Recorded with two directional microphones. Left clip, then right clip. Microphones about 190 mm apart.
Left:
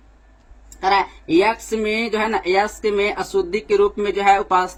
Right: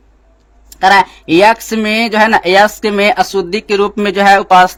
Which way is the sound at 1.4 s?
65° right (ahead or behind).